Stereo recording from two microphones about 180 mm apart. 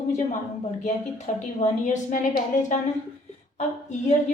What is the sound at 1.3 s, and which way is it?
Speech, 40° left (ahead or behind).